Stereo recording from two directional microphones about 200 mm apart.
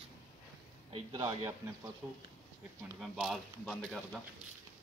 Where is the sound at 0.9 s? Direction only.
25° right (ahead or behind).